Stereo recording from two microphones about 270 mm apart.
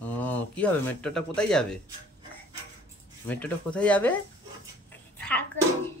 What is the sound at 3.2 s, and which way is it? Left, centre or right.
Speech, centre.